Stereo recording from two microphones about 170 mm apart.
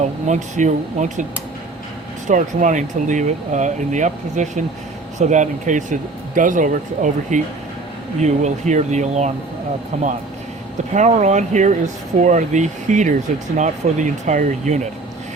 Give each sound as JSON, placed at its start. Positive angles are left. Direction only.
{"t": 0.3, "sound": "speech", "side_deg": -45}
{"t": 2.2, "sound": "speech", "side_deg": -50}